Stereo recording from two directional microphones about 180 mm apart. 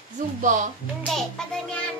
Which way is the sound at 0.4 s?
45° right (ahead or behind).